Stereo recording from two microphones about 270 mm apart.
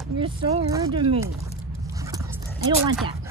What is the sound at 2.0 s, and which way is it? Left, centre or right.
Dog, centre.